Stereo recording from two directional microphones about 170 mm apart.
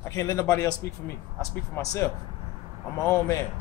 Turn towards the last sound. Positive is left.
turn(degrees=15)  # may be behind; listen again after turning